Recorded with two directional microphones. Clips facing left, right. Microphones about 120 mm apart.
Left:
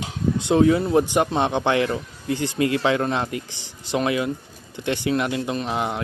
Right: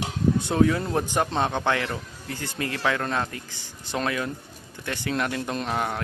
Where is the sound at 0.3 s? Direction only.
20° left (ahead or behind).